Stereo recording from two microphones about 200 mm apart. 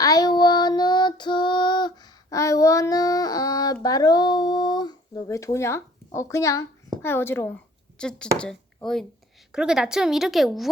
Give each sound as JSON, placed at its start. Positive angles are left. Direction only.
{"t": 0.0, "sound": "female singing", "side_deg": 20}
{"t": 6.1, "sound": "a woman's voice", "side_deg": 15}